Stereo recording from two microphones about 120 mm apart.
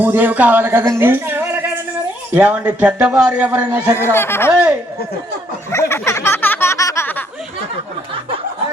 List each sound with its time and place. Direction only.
0.0 s a man's voice: 15° right (ahead or behind)
3.9 s speech: 20° left (ahead or behind)
5.7 s a sound: 25° left (ahead or behind)